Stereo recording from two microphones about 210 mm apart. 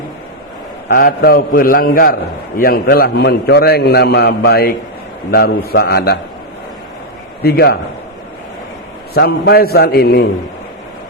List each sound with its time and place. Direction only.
0.9 s a man's voice: 45° left (ahead or behind)
7.4 s a man's voice: 50° left (ahead or behind)
9.1 s a man's voice: 50° left (ahead or behind)